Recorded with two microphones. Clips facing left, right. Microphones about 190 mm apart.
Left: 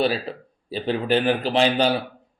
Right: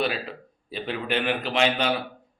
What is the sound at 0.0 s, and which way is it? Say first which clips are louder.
A man's voice: left 5 dB; 35° left (ahead or behind).